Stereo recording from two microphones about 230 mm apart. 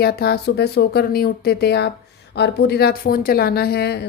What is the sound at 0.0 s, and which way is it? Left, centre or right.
Speech, left.